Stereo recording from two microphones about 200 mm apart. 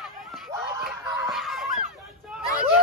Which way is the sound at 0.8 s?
Centre (ahead or behind).